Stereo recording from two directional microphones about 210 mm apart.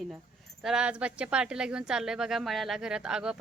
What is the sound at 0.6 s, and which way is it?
Speech, 5° right (ahead or behind).